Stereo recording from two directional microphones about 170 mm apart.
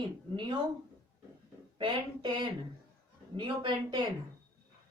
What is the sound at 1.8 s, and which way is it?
A woman's voice, 25° right (ahead or behind).